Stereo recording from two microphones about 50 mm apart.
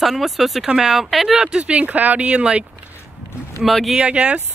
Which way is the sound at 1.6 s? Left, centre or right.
Right.